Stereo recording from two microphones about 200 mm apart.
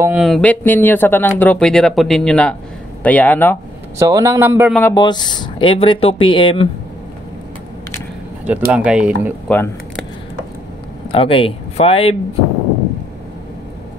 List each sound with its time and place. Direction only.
0.0 s speech: 5° right (ahead or behind)
4.0 s a man's voice: 15° right (ahead or behind)
4.9 s speech: 20° left (ahead or behind)
8.5 s speech: 5° right (ahead or behind)
9.5 s speech: 5° left (ahead or behind)
11.1 s speech: 25° left (ahead or behind)